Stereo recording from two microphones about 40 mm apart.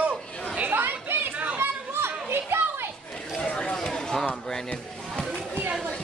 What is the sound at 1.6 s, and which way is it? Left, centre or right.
Children playing, right.